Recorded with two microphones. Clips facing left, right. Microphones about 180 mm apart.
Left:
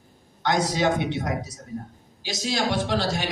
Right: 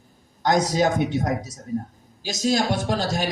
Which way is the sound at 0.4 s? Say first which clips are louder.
Right 3 dB; 45° right (ahead or behind).